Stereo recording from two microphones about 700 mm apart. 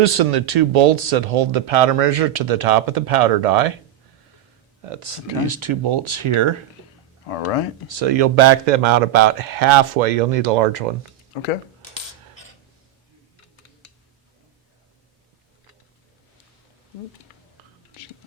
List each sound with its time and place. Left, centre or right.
0.0 s speech: right
4.8 s speech: right
7.9 s a man's voice: right